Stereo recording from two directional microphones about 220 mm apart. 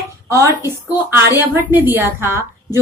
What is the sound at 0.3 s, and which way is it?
Speech, 15° right (ahead or behind).